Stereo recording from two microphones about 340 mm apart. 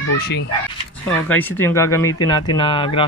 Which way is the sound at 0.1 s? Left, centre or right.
Left.